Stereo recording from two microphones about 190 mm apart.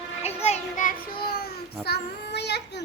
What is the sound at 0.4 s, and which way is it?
Child singing, 40° left (ahead or behind).